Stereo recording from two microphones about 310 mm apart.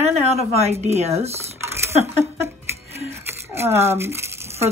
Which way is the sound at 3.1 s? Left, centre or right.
Centre.